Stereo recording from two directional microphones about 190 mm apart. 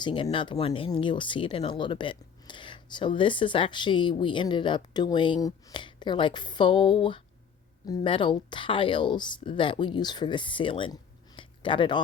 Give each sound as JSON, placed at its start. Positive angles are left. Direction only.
{"t": 0.0, "sound": "speech", "side_deg": 25}